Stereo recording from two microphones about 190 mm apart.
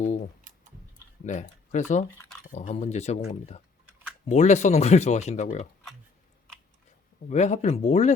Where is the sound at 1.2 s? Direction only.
40° left (ahead or behind).